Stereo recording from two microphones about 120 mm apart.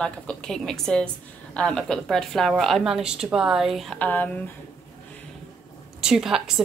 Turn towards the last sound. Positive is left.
turn(degrees=-5)  # may be behind; listen again after turning